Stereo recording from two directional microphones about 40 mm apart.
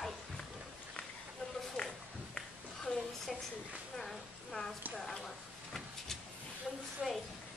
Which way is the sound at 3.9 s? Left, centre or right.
Centre.